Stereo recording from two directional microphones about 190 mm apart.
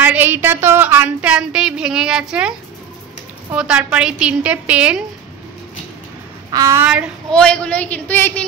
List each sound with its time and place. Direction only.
0.0 s a sound: 10° right (ahead or behind)
3.5 s a woman's voice: 5° right (ahead or behind)
6.5 s a child's voice: 15° right (ahead or behind)
7.3 s a man's voice: 5° left (ahead or behind)